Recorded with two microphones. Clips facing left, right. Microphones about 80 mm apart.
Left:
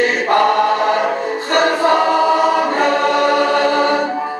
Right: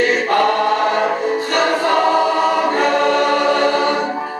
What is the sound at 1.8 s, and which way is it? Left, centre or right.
Choir, centre.